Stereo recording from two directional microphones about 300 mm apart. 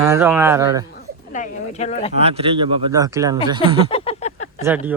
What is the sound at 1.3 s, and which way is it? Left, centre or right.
Speech, left.